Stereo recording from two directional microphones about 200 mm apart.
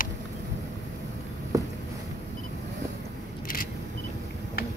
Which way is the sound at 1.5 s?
15° right (ahead or behind).